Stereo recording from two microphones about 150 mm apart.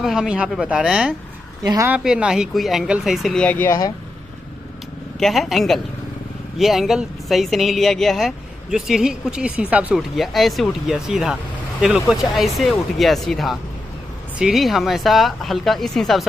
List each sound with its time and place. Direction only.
0.0 s speech: 5° right (ahead or behind)
1.6 s a woman's voice: 25° right (ahead or behind)
1.9 s speech: 5° right (ahead or behind); by 3.7 s 10° left (ahead or behind)
5.2 s speech: centre (ahead or behind)